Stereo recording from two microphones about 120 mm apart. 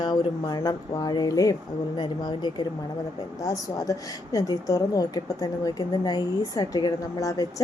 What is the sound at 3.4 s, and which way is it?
A woman's voice, 30° left (ahead or behind).